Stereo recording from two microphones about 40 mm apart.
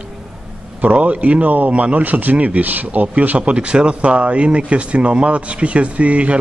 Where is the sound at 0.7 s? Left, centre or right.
Right.